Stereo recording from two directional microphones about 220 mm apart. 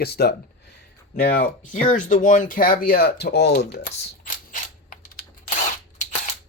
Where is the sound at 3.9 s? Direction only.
35° left (ahead or behind).